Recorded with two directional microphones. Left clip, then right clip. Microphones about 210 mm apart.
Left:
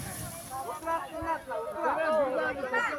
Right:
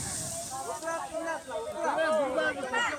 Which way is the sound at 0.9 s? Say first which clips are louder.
Left 3 dB; 40° right (ahead or behind).